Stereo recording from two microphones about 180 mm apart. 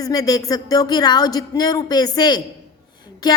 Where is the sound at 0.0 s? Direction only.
20° left (ahead or behind).